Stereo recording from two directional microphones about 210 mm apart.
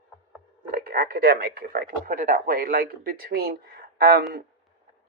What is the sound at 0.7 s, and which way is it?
Speech, 45° right (ahead or behind).